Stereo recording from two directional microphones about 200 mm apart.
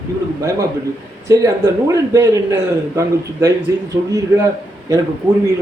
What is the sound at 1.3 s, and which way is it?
A man's voice, 15° right (ahead or behind).